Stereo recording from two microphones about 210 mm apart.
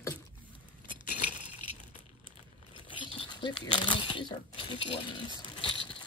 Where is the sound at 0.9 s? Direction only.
40° left (ahead or behind).